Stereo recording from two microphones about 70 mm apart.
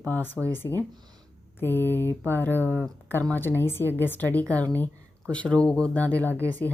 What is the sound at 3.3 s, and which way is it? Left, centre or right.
A woman's voice, left.